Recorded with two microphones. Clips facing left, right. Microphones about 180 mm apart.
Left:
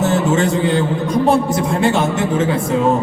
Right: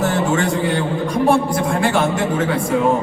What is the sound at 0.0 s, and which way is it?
A man's voice, 25° left (ahead or behind).